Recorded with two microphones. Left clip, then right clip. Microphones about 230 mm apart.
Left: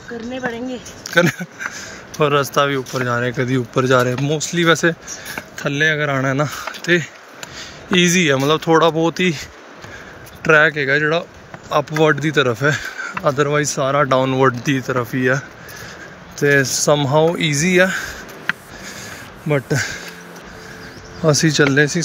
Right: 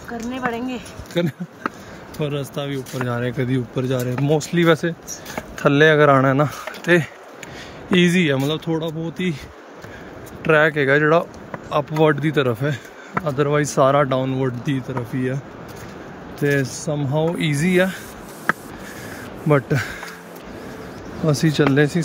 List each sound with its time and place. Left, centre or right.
0.3 s speech: centre
2.1 s speech: centre
8.8 s speech: left
9.1 s speech: centre
10.4 s speech: centre
19.4 s speech: centre
21.3 s speech: centre